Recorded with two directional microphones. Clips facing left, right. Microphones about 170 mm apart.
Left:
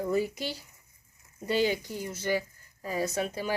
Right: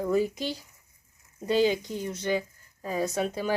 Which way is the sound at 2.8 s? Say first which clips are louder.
Right 2 dB; 5° left (ahead or behind).